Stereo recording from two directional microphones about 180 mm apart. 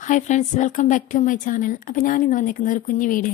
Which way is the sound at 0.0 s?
45° left (ahead or behind).